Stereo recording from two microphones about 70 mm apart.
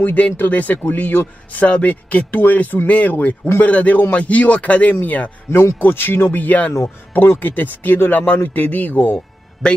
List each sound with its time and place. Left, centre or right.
0.0 s speech: left
9.6 s a man's voice: centre